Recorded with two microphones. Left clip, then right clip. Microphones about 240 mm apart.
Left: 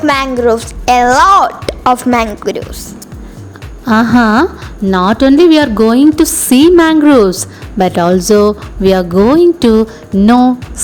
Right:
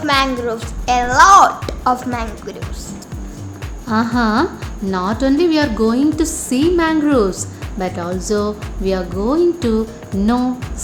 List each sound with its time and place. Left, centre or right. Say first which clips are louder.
0.0 s a woman's voice: left 6 dB; left
3.8 s a woman's voice: left 8 dB; left